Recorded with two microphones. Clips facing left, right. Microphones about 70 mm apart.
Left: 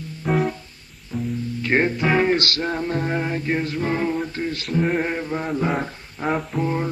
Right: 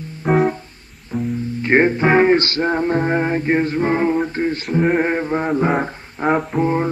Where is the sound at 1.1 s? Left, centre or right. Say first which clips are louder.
Right 4 dB; right.